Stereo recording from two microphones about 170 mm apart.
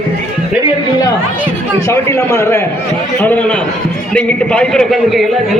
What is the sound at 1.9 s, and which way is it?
A man's voice, 15° left (ahead or behind).